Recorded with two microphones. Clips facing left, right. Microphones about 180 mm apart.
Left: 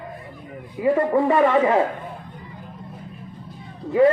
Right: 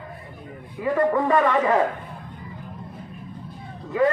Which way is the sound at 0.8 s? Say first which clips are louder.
Left 2 dB; 30° left (ahead or behind).